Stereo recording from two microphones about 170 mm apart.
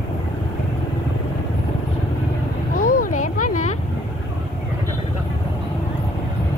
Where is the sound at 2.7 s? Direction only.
55° left (ahead or behind).